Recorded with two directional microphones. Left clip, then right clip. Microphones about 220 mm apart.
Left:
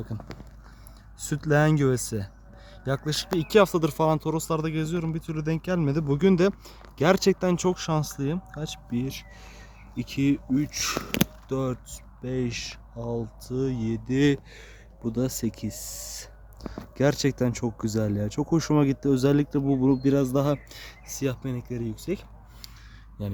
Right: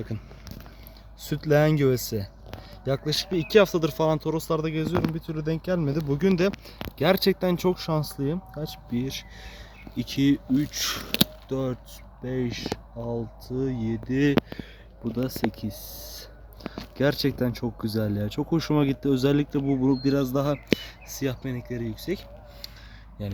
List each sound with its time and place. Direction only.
1.2 s speech: 5° left (ahead or behind)
23.2 s speech: 15° left (ahead or behind)